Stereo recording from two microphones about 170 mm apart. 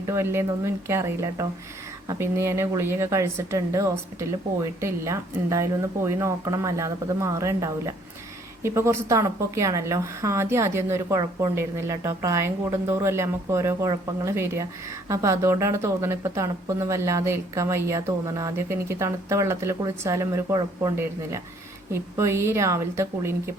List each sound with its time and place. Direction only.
0.0 s speech: 15° right (ahead or behind)